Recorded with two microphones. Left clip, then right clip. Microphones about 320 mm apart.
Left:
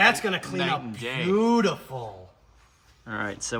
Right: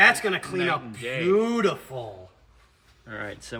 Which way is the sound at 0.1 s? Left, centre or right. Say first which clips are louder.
Right 2 dB; centre.